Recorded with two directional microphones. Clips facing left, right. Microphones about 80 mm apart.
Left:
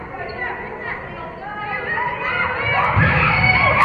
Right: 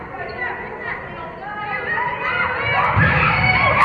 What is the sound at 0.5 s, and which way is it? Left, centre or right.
Chatter, right.